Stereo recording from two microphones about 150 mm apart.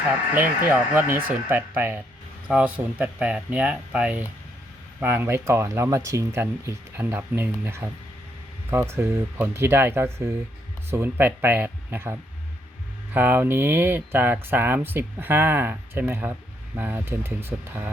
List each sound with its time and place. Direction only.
0.3 s speech: 10° right (ahead or behind)
13.1 s speech: 15° right (ahead or behind)